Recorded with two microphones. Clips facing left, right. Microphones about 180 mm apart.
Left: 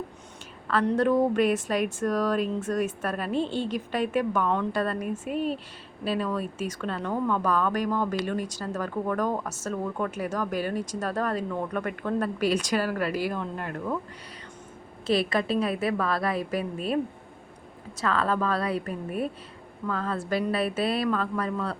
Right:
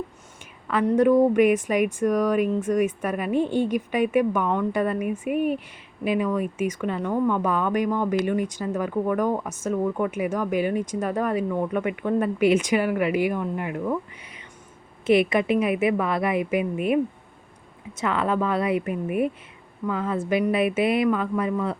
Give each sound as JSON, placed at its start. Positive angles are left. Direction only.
{"t": 0.7, "sound": "speech", "side_deg": -15}
{"t": 15.0, "sound": "a woman's voice", "side_deg": -20}